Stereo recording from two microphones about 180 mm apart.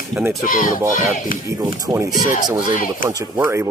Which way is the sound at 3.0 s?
15° right (ahead or behind).